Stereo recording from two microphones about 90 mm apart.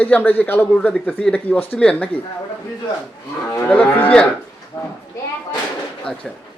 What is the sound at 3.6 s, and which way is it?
Speech, 15° left (ahead or behind).